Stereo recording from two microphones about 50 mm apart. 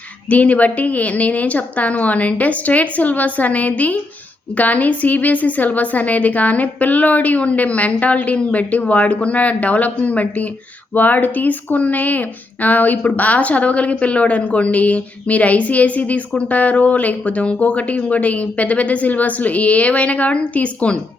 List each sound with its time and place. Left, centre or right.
0.3 s a woman's voice: left